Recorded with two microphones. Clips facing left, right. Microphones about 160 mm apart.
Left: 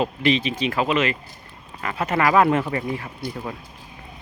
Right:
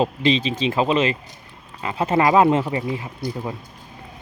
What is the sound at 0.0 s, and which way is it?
Speech, 25° right (ahead or behind).